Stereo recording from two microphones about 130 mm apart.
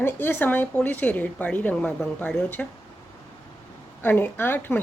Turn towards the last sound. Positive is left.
turn(degrees=15)  # may be behind; listen again after turning